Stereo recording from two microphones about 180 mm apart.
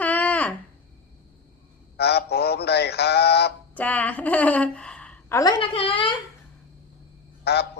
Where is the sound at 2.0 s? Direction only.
65° left (ahead or behind).